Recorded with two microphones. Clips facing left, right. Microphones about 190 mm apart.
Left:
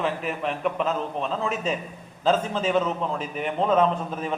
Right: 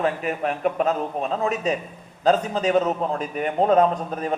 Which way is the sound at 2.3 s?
40° right (ahead or behind).